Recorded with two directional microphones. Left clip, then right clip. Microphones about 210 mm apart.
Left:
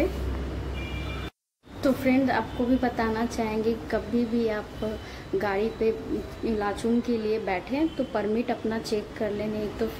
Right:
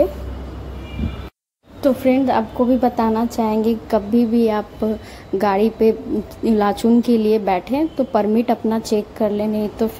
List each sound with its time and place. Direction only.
1.8 s a woman's voice: 25° right (ahead or behind)